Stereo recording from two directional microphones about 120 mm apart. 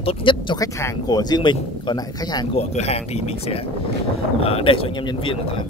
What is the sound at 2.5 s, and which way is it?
Speech, 60° left (ahead or behind).